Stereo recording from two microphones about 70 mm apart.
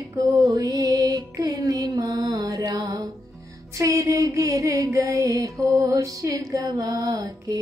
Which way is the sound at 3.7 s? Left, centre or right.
Right.